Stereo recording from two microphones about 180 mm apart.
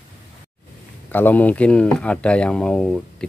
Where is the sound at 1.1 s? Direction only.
10° left (ahead or behind).